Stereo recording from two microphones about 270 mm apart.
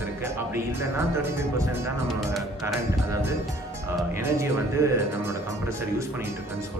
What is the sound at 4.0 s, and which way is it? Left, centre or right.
Speech, centre.